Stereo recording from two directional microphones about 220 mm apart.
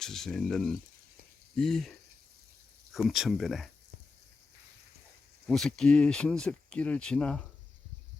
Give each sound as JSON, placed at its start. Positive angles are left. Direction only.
{"t": 0.0, "sound": "speech", "side_deg": 0}
{"t": 5.5, "sound": "speech", "side_deg": 0}